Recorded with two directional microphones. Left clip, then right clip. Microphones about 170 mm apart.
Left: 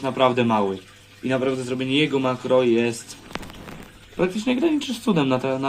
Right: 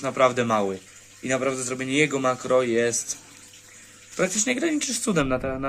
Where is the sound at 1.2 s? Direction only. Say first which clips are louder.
Left 2 dB; 50° right (ahead or behind).